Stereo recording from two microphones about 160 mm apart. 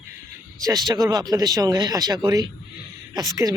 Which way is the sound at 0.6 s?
25° right (ahead or behind).